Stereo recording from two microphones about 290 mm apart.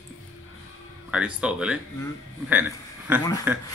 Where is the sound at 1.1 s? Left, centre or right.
Centre.